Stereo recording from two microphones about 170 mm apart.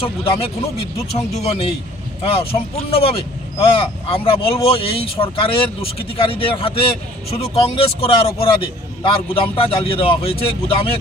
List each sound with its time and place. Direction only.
0.3 s speech: 35° left (ahead or behind)